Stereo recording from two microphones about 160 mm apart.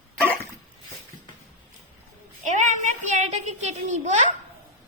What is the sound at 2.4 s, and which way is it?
A child's voice, 50° right (ahead or behind).